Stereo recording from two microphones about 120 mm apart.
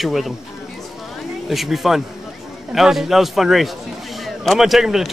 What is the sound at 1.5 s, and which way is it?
Speech, centre (ahead or behind).